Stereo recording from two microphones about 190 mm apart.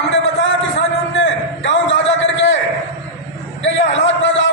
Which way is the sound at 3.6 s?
80° left.